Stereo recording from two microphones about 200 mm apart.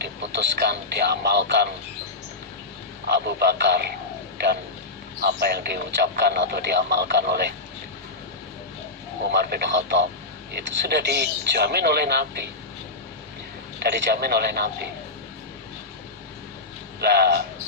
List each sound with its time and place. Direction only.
0.0 s speech: 55° right (ahead or behind)
3.1 s speech: 55° right (ahead or behind)
5.2 s speech: 50° right (ahead or behind)
9.3 s speech: 55° right (ahead or behind)
13.8 s a man's voice: 55° right (ahead or behind)
17.0 s a man's voice: 55° right (ahead or behind)